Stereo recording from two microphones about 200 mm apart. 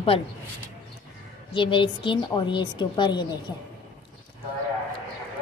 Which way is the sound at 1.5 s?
25° left (ahead or behind).